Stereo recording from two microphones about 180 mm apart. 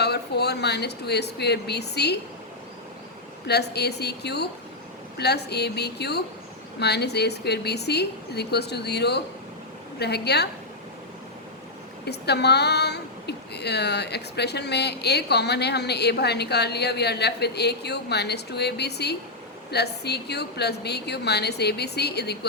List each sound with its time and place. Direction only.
0.0 s speech: 65° left (ahead or behind)
3.4 s a woman's voice: 65° left (ahead or behind)
12.0 s a woman's voice: 65° left (ahead or behind)